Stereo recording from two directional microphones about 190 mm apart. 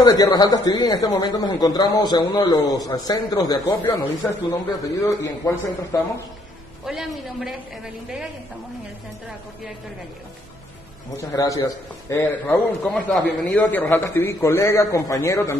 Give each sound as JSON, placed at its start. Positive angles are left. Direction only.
{"t": 0.0, "sound": "a man's voice", "side_deg": 20}
{"t": 6.8, "sound": "a woman's voice", "side_deg": 0}
{"t": 11.3, "sound": "a man's voice", "side_deg": 20}